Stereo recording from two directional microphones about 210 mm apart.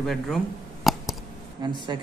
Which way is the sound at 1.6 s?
20° right (ahead or behind).